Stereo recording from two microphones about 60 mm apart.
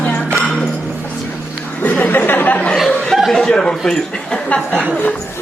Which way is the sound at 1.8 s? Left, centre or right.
Left.